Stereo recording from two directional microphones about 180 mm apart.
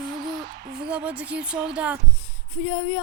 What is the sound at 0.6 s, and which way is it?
Speech, 65° right (ahead or behind).